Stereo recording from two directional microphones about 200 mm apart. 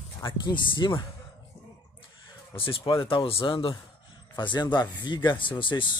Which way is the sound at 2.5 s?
25° left (ahead or behind).